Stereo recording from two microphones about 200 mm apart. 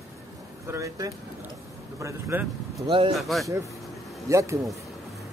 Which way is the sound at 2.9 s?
25° right (ahead or behind).